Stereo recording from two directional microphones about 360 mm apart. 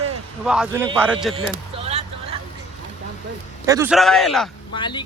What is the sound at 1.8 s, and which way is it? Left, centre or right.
Vehicle, centre.